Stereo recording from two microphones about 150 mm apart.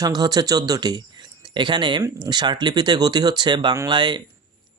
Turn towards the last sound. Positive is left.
turn(degrees=-30)  # may be behind; listen again after turning